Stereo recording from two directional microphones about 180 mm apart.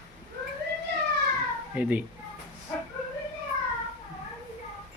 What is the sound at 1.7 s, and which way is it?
Speech, 10° right (ahead or behind).